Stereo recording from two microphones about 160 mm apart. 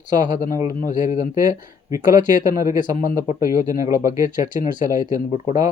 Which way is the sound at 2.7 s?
55° left (ahead or behind).